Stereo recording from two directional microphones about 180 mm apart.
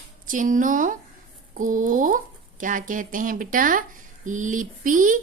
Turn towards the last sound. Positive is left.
turn(degrees=-45)  # may be behind; listen again after turning